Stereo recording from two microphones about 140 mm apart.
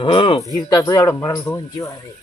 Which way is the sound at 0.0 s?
35° left (ahead or behind).